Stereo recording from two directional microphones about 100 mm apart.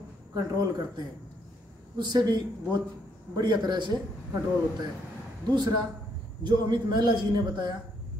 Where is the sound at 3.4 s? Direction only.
45° right (ahead or behind).